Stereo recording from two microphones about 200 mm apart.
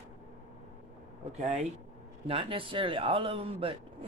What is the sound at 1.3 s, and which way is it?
Speech, 35° right (ahead or behind).